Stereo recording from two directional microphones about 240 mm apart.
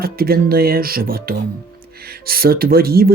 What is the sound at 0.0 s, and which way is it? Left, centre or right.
Speech, right.